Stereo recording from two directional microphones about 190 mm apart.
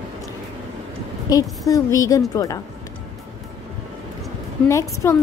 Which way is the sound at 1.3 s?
20° left (ahead or behind).